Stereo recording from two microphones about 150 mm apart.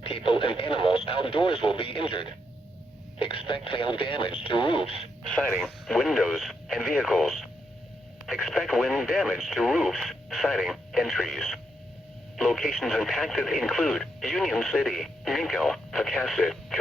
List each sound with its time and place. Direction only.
0.0 s speech: 40° left (ahead or behind)
5.3 s speech: 5° left (ahead or behind)